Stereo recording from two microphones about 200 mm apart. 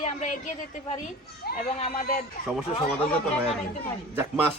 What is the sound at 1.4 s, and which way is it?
Speech, 55° left (ahead or behind).